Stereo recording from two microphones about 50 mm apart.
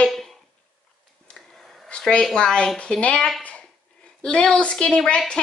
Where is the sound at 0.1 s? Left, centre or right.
Centre.